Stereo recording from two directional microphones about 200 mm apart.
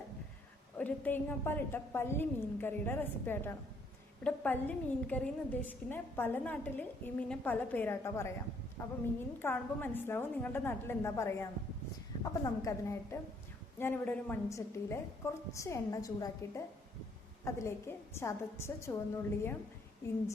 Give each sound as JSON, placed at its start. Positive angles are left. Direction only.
{"t": 0.8, "sound": "a woman's voice", "side_deg": 10}
{"t": 9.4, "sound": "a woman's voice", "side_deg": 10}